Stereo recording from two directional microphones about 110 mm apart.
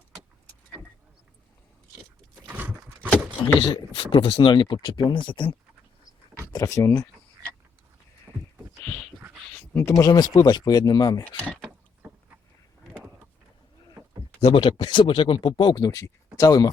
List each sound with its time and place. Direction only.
2.5 s a sound: 15° right (ahead or behind)
3.6 s speech: 55° left (ahead or behind)
6.5 s speech: 30° left (ahead or behind)
9.7 s speech: 25° left (ahead or behind)
11.2 s a sound: 10° left (ahead or behind)
14.4 s speech: 45° left (ahead or behind)